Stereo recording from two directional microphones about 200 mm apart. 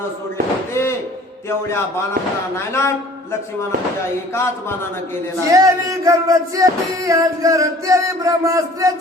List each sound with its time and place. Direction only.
0.7 s a sound: 15° left (ahead or behind)
1.5 s speech: 15° left (ahead or behind)
4.4 s speech: 15° left (ahead or behind)
5.5 s music: 15° right (ahead or behind)